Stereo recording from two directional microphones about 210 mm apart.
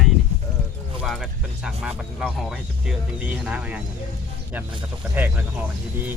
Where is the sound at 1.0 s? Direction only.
Centre (ahead or behind).